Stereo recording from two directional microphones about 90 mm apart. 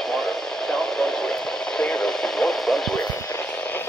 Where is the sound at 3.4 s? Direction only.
15° left (ahead or behind).